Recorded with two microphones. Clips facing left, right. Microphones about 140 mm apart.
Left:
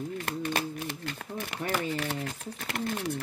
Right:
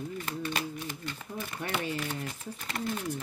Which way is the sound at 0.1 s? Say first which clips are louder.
Left 4 dB; 60° left (ahead or behind).